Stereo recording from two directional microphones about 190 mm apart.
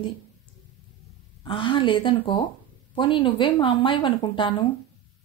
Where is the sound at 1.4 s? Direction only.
25° left (ahead or behind).